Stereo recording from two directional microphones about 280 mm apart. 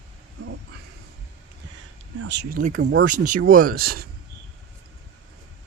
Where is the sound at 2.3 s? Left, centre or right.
Right.